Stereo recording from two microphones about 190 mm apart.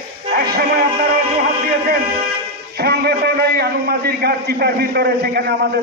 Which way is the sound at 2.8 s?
55° right (ahead or behind).